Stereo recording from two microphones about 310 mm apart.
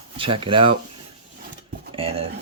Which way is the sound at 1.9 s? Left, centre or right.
Centre.